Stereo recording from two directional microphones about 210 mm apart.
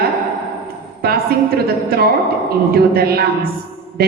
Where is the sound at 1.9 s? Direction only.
50° right (ahead or behind).